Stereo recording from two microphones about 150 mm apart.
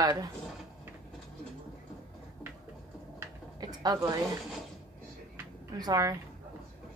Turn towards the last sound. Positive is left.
turn(degrees=-25)  # may be behind; listen again after turning